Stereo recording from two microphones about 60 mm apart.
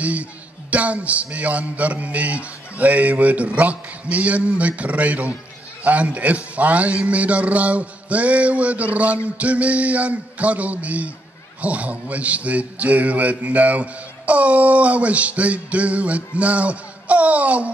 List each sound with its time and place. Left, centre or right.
0.0 s a man's voice: right